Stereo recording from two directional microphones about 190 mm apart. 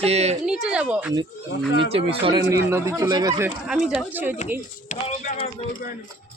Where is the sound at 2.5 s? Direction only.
15° right (ahead or behind).